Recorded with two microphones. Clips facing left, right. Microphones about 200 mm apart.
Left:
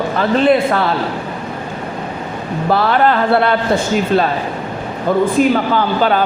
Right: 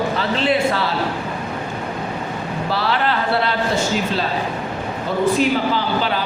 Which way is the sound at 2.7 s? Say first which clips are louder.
Left 8 dB; 50° left (ahead or behind).